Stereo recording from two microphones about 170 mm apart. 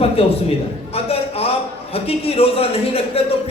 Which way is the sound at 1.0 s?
35° left (ahead or behind).